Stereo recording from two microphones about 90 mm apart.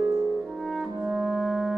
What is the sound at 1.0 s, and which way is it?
French horn, 5° right (ahead or behind).